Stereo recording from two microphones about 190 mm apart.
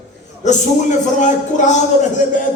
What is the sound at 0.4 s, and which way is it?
A man's voice, 40° left (ahead or behind).